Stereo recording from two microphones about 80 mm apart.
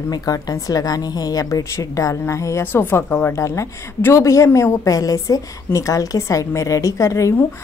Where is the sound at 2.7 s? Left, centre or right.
Left.